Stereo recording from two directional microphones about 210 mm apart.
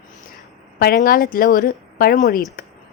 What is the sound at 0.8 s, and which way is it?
Speech, 45° left (ahead or behind).